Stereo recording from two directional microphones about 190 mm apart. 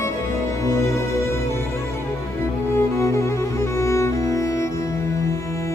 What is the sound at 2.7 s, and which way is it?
Music, 15° left (ahead or behind).